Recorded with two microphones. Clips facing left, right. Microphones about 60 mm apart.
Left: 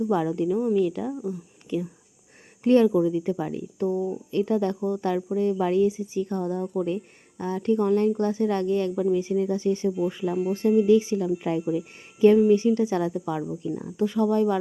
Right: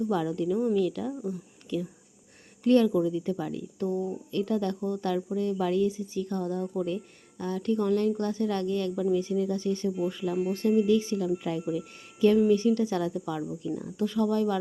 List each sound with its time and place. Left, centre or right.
0.1 s speech: left
1.1 s speech: centre
1.7 s speech: left